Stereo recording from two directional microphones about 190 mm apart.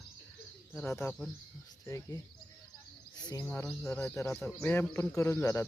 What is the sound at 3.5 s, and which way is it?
Speech, 10° left (ahead or behind).